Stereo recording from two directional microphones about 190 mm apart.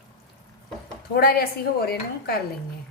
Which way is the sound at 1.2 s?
55° left (ahead or behind).